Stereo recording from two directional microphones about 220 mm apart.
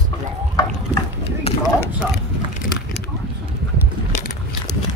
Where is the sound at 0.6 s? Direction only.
15° left (ahead or behind).